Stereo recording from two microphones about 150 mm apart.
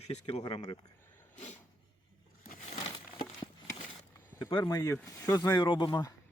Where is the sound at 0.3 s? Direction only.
40° left (ahead or behind).